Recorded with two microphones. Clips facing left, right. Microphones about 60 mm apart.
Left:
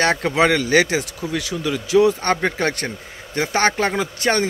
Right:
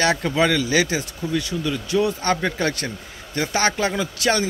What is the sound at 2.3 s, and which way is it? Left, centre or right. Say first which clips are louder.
Speech: left 2 dB; left.